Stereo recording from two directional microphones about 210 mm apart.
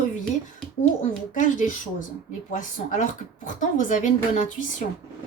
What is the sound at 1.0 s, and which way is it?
A woman's voice, 35° left (ahead or behind).